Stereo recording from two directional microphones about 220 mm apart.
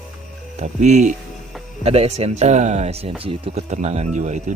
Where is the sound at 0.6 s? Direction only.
30° right (ahead or behind).